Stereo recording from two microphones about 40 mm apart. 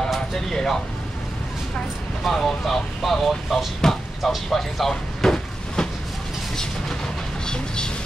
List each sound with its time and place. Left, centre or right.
0.5 s speech: centre
2.3 s speech: centre
3.0 s speech: centre
3.8 s speech: centre
4.2 s a sound: centre
6.5 s vehicle: centre
7.4 s a sound: centre